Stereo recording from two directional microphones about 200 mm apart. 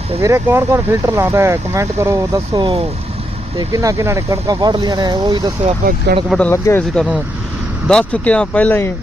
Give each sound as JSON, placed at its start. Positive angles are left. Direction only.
{"t": 0.2, "sound": "speech", "side_deg": -15}
{"t": 6.3, "sound": "speech", "side_deg": 10}